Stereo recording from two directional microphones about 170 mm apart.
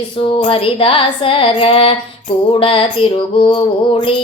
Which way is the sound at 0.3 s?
30° left (ahead or behind).